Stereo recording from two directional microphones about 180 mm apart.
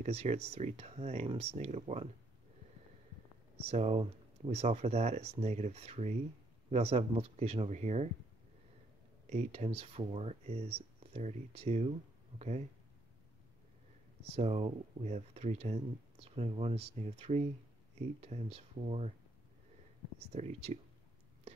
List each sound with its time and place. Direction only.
0.0 s speech: 35° right (ahead or behind)
3.6 s speech: 35° right (ahead or behind)
9.3 s speech: 35° right (ahead or behind)
14.3 s speech: 35° right (ahead or behind)
20.3 s speech: 40° right (ahead or behind)